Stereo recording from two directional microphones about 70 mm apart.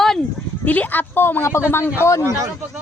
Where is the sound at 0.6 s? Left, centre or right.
Left.